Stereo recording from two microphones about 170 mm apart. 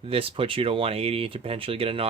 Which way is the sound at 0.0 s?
35° right (ahead or behind).